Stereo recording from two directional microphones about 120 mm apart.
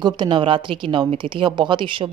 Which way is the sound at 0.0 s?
40° right (ahead or behind).